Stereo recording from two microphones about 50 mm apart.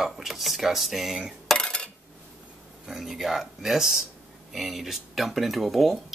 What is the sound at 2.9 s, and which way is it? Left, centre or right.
Speech, centre.